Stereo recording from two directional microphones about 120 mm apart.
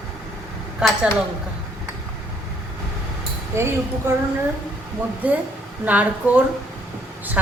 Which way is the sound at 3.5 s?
20° right (ahead or behind).